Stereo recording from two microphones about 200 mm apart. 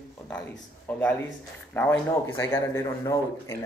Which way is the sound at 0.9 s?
10° left (ahead or behind).